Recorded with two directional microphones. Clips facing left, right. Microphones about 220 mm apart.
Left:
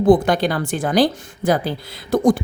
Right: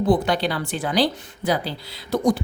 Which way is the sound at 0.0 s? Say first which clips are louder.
Left 6 dB; 50° left (ahead or behind).